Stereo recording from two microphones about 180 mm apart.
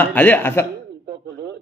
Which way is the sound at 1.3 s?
75° right (ahead or behind).